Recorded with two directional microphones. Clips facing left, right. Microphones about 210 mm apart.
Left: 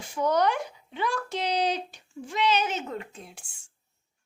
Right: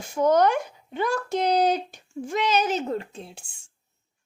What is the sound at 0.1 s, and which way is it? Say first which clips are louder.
Speech: right 5 dB; 45° right (ahead or behind).